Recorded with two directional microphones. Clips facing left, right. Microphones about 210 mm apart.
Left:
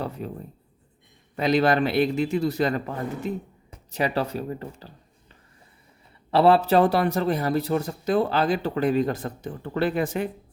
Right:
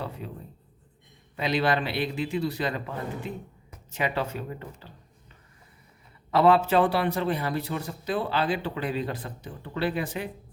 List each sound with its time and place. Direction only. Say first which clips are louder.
1.4 s a man's voice: left 5 dB; 45° left (ahead or behind)
6.3 s a man's voice: left 3 dB; 35° left (ahead or behind)